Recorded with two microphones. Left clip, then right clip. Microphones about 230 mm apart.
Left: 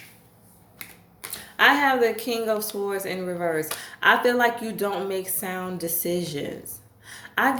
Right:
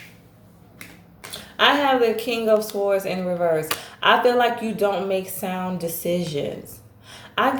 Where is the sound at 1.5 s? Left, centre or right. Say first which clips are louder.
Right 1 dB; left.